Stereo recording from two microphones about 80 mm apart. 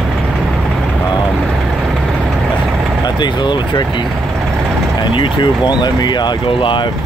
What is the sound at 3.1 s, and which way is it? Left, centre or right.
Speech, left.